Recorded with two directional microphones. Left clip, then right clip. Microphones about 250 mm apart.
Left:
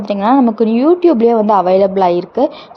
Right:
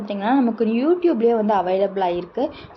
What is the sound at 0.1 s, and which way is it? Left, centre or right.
A woman's voice, left.